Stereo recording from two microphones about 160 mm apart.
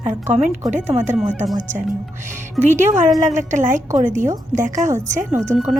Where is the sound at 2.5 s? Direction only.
50° right (ahead or behind).